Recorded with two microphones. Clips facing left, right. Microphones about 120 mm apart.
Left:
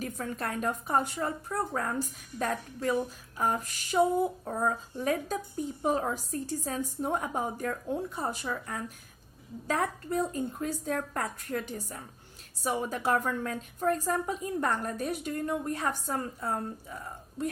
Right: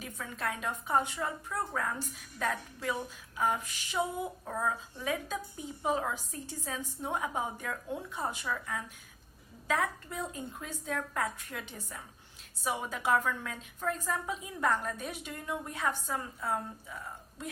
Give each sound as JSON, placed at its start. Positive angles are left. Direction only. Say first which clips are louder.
{"t": 0.0, "sound": "a woman's voice", "louder": "left 3 dB", "side_deg": 45}
{"t": 4.4, "sound": "a woman's voice", "louder": "left 3 dB", "side_deg": 30}
{"t": 12.6, "sound": "a woman's voice", "louder": "left 3 dB", "side_deg": 40}